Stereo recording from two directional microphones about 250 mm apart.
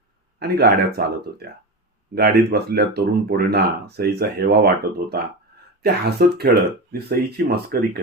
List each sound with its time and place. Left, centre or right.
0.3 s speech: right